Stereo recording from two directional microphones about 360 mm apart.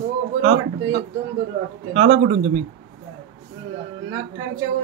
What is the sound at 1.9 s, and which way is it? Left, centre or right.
Speech, centre.